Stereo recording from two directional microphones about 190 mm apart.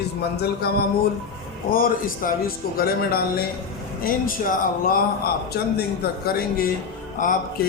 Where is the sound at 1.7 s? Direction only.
50° left (ahead or behind).